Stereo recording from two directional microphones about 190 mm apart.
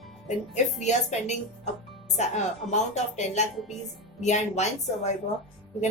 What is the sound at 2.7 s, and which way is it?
A woman's voice, 35° left (ahead or behind).